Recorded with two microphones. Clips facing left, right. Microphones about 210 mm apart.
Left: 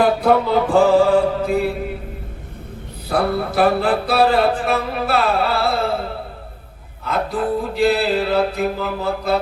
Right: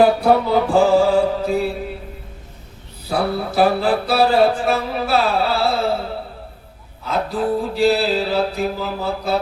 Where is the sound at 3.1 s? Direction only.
55° left (ahead or behind).